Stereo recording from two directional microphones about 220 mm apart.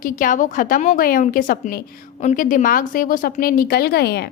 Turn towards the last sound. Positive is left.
turn(degrees=45)  # may be behind; listen again after turning